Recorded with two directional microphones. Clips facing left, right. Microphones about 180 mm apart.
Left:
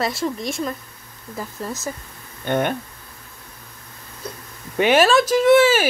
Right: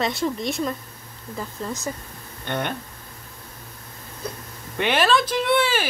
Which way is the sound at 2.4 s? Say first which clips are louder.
Left 6 dB; 50° left (ahead or behind).